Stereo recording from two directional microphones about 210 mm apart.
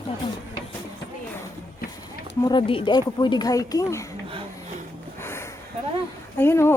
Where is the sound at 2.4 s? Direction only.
25° left (ahead or behind).